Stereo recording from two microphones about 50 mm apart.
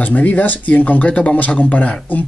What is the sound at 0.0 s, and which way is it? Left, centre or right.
Speech, left.